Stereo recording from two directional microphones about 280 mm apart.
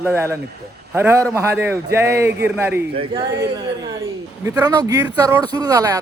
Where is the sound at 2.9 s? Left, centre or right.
Centre.